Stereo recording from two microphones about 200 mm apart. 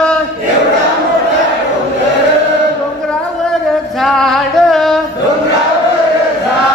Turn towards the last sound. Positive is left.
turn(degrees=0)  # may be behind; listen again after turning